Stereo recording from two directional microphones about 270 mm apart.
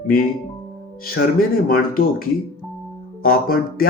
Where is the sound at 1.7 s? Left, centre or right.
Left.